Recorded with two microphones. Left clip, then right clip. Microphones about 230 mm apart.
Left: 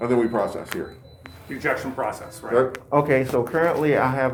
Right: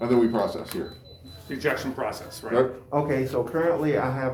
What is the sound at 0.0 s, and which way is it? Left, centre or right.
Speech, centre.